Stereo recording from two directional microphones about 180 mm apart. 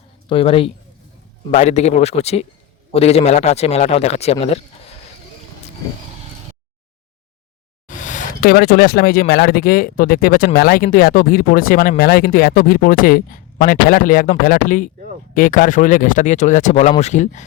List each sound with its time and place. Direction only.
0.3 s a man's voice: 30° left (ahead or behind)
7.9 s a man's voice: 45° left (ahead or behind)